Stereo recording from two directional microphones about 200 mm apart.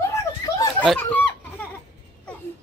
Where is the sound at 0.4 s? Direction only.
15° left (ahead or behind).